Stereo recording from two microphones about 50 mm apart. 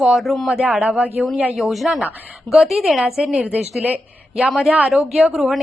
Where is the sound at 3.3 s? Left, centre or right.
Right.